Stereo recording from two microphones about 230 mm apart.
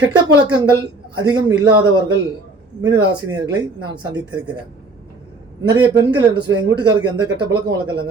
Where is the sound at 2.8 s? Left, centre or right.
Centre.